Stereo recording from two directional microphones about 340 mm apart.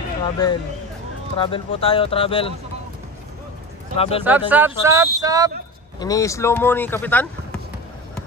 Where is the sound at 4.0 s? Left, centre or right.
Centre.